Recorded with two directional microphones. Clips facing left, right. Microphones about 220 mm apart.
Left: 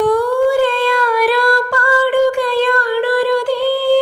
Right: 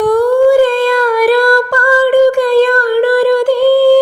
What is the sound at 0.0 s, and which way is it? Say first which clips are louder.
Humming: right 5 dB; 45° right (ahead or behind).